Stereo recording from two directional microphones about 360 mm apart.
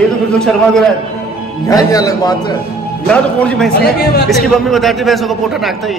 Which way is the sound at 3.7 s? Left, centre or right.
Left.